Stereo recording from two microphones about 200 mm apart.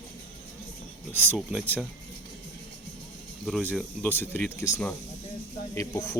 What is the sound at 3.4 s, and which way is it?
Speech, 5° left (ahead or behind).